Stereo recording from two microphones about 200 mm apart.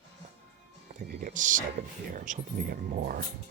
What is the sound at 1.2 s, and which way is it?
Speech, 40° right (ahead or behind).